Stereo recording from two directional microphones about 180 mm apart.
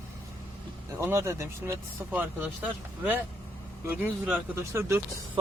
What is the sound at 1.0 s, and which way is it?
Speech, 15° right (ahead or behind).